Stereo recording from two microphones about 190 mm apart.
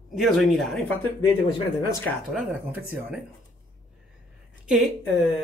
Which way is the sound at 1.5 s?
20° left (ahead or behind).